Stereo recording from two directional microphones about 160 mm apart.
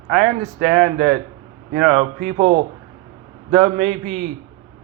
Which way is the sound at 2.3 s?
35° right (ahead or behind).